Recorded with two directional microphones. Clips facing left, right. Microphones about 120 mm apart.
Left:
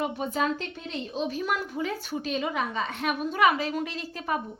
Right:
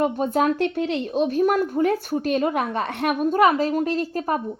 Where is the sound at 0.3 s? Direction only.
65° right (ahead or behind).